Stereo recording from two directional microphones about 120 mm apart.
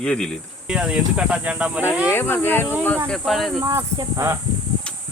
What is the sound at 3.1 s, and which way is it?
Speech, centre (ahead or behind).